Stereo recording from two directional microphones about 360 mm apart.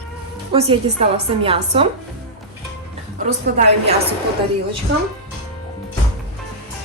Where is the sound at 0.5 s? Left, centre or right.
Centre.